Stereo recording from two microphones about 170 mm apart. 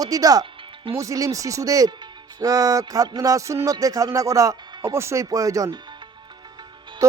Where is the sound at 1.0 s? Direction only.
20° right (ahead or behind).